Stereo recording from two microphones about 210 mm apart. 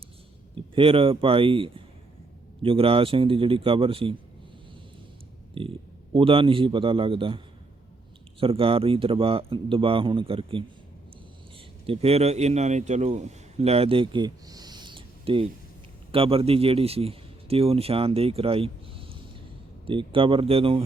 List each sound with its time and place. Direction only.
0.5 s a man's voice: 25° right (ahead or behind)
5.6 s speech: 25° right (ahead or behind)
11.9 s a man's voice: 30° right (ahead or behind)